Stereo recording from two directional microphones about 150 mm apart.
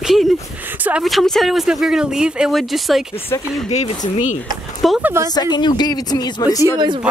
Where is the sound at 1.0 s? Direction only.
Centre (ahead or behind).